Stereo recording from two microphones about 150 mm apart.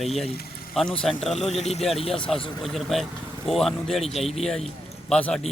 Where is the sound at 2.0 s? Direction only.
35° left (ahead or behind).